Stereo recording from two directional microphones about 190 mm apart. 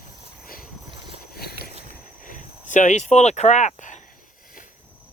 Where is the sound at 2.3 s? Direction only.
40° left (ahead or behind).